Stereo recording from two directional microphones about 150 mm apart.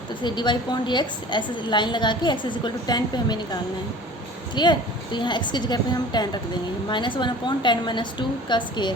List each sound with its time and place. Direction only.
0.2 s a woman's voice: 30° left (ahead or behind)